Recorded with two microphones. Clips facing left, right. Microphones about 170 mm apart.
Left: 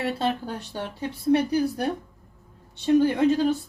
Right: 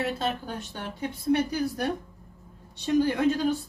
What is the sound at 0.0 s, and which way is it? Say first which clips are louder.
Speech: left 3 dB; 30° left (ahead or behind).